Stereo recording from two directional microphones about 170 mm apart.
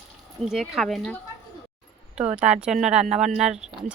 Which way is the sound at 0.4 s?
Centre (ahead or behind).